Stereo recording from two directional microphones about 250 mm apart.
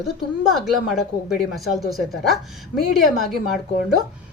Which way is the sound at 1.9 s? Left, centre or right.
Centre.